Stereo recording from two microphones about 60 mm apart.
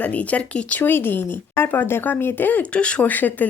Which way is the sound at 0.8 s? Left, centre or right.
Left.